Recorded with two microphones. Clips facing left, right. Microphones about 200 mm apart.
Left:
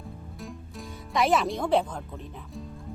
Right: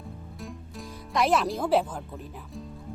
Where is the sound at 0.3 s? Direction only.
Centre (ahead or behind).